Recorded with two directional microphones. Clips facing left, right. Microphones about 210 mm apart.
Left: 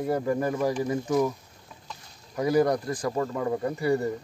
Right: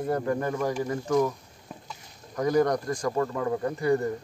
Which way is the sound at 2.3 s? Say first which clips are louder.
Left 1 dB; 10° left (ahead or behind).